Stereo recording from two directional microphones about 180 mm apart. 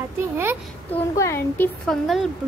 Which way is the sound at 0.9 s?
15° left (ahead or behind).